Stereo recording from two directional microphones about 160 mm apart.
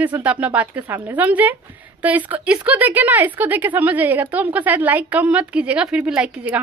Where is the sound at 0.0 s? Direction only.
10° right (ahead or behind).